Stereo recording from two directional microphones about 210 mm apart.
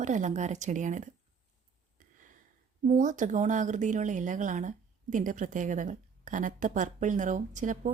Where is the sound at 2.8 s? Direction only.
35° right (ahead or behind).